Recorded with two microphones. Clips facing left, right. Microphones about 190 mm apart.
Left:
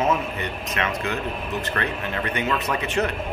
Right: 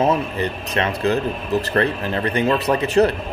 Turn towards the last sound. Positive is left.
turn(degrees=-35)  # may be behind; listen again after turning